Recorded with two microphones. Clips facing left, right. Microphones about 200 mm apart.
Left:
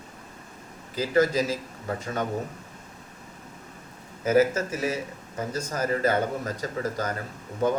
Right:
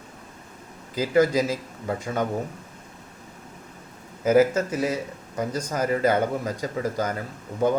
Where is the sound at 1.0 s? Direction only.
15° right (ahead or behind).